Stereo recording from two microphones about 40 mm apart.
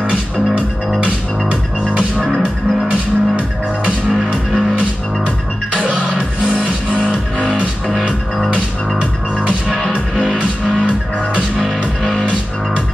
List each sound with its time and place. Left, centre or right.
1.0 s music: right
5.8 s music: right
11.5 s music: centre